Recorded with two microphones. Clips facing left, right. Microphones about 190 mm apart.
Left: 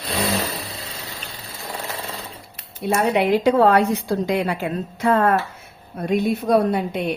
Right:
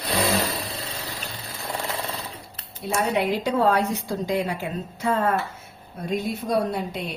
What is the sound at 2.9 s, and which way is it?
A woman's voice, 65° left (ahead or behind).